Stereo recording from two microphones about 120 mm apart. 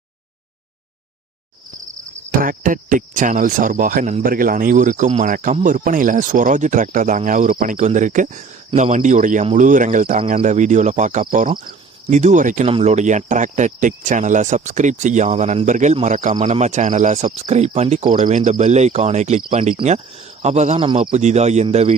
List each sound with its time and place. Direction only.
2.6 s speech: 90° right
12.8 s speech: 75° right (ahead or behind)
18.1 s speech: 90° right; by 19.4 s 70° right (ahead or behind)
19.5 s speech: 50° right (ahead or behind)
20.4 s speech: 70° right (ahead or behind)
20.7 s speech: 45° right (ahead or behind)
21.0 s speech: 75° right (ahead or behind)